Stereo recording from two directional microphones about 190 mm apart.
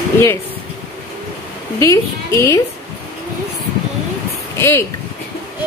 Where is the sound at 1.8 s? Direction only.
15° left (ahead or behind).